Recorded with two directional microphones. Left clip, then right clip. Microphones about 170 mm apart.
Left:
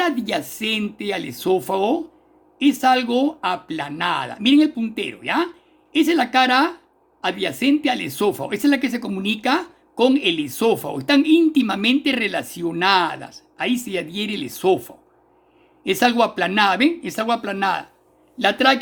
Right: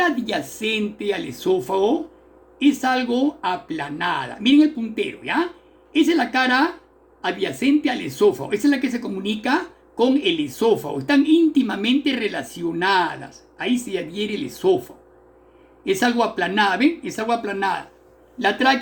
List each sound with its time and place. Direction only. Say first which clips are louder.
0.0 s speech: even; 70° left (ahead or behind); by 2.0 s 85° left
2.6 s speech: left 3 dB; 75° left (ahead or behind)
15.9 s speech: left 2 dB; 70° left (ahead or behind)